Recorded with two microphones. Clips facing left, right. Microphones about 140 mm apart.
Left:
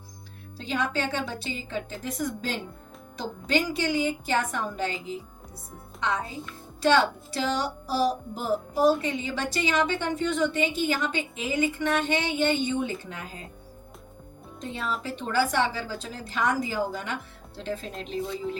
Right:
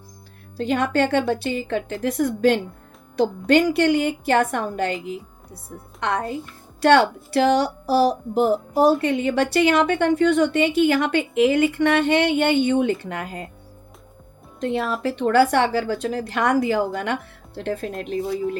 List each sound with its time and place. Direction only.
0.5 s a woman's voice: 55° right (ahead or behind)
6.0 s a woman's voice: 65° right (ahead or behind)
14.6 s a woman's voice: 70° right (ahead or behind)